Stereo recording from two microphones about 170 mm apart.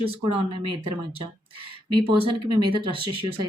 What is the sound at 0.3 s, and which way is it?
Speech, 30° right (ahead or behind).